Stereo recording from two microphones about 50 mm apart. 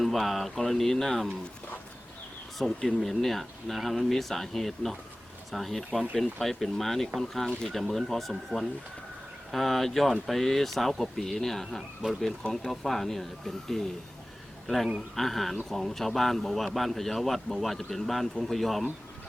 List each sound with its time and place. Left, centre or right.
0.0 s a man's voice: centre
2.6 s a man's voice: centre
12.0 s speech: right
12.5 s a man's voice: centre
15.1 s a man's voice: centre